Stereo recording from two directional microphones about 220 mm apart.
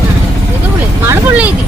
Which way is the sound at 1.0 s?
10° right (ahead or behind).